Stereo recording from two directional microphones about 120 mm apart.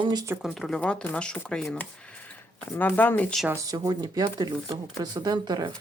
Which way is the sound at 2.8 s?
15° left (ahead or behind).